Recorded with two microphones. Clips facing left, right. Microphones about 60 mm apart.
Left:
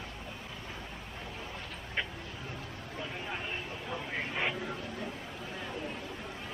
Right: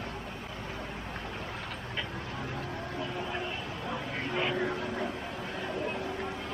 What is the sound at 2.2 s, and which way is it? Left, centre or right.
Vehicle, right.